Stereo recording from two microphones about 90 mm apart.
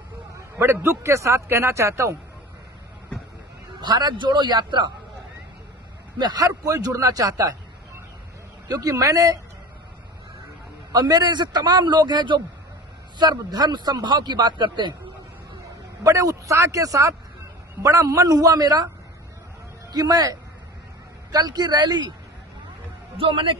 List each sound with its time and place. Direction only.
0.6 s speech: 30° right (ahead or behind)
3.8 s a man's voice: 55° right (ahead or behind)
6.1 s speech: 50° right (ahead or behind)
8.6 s speech: 40° right (ahead or behind)
10.9 s speech: 45° right (ahead or behind)
15.6 s a man's voice: 35° right (ahead or behind)
19.9 s speech: 50° right (ahead or behind)
23.1 s a man's voice: 75° right (ahead or behind)